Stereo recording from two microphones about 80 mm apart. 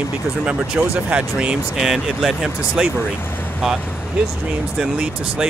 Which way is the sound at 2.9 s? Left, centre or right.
Left.